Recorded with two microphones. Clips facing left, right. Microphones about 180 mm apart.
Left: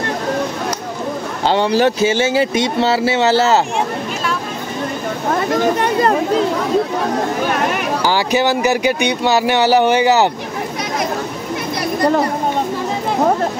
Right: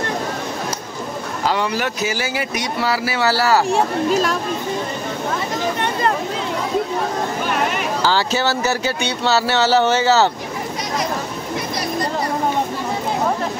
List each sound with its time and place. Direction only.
1.5 s speech: 30° left (ahead or behind)
3.7 s speech: 40° right (ahead or behind)
5.3 s speech: 55° left (ahead or behind)
8.0 s speech: 15° left (ahead or behind)